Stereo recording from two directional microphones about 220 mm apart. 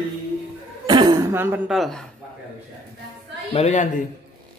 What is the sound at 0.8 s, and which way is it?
Speech, 20° right (ahead or behind).